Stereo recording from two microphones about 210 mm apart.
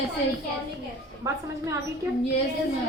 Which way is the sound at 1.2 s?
15° right (ahead or behind).